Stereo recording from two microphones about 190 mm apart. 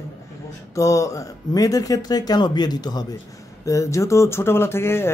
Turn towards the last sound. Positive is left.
turn(degrees=15)  # may be behind; listen again after turning